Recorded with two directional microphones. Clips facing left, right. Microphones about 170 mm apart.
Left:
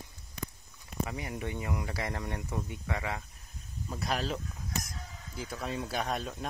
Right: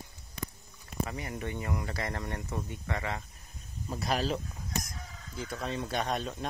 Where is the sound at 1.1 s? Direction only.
10° left (ahead or behind).